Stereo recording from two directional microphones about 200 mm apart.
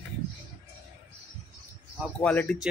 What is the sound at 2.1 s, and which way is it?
Speech, 5° left (ahead or behind).